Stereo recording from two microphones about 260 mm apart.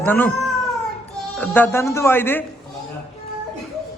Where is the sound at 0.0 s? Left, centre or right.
Centre.